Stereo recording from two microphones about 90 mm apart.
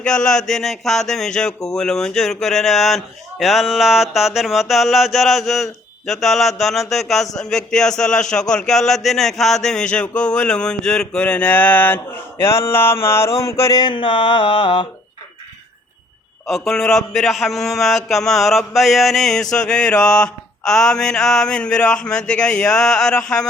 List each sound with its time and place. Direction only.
0.0 s a man's voice: 10° left (ahead or behind); by 13.7 s 35° left (ahead or behind)
13.7 s mantra: 60° left (ahead or behind)
16.5 s a man's voice: centre (ahead or behind)